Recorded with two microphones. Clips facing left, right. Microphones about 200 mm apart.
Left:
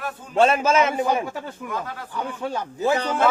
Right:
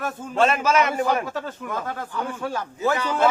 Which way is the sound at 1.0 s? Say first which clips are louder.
Even; 15° left (ahead or behind).